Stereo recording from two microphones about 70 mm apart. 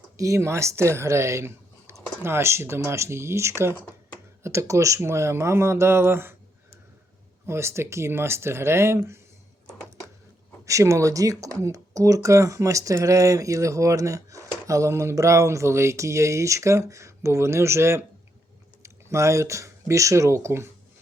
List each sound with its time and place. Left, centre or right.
0.2 s speech: right
7.4 s speech: right
10.7 s speech: right